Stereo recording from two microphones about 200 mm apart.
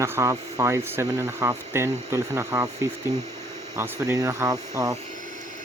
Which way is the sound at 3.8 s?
15° right (ahead or behind).